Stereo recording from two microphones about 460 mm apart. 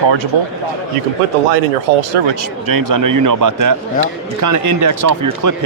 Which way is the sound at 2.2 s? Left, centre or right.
Right.